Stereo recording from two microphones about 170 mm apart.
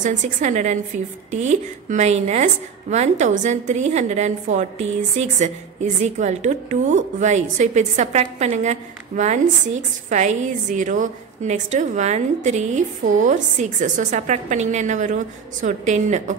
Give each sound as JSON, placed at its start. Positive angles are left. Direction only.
{"t": 0.0, "sound": "a woman's voice", "side_deg": -45}